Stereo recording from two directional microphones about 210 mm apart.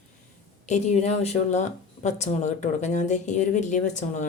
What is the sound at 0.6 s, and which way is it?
Speech, 35° left (ahead or behind).